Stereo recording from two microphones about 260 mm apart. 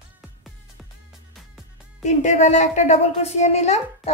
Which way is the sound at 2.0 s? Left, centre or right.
Left.